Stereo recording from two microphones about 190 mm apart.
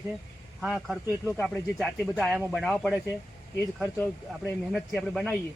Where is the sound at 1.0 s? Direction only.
15° left (ahead or behind).